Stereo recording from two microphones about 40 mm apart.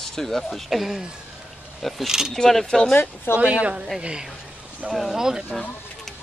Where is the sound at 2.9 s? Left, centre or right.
Left.